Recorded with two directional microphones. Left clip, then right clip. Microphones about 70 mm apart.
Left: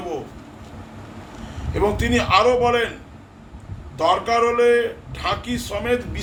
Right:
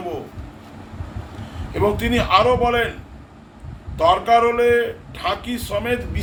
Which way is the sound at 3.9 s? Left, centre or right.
Centre.